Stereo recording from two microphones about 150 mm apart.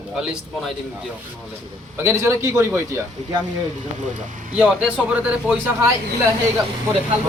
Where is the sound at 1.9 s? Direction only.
15° right (ahead or behind).